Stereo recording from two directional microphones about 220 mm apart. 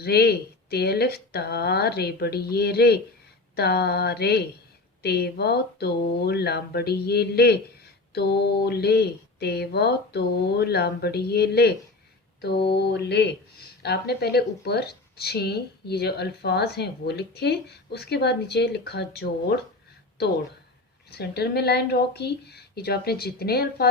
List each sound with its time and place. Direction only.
0.0 s speech: 45° left (ahead or behind)
21.1 s speech: 45° left (ahead or behind)